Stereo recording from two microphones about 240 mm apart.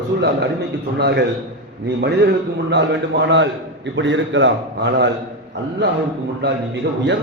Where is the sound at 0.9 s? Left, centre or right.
Right.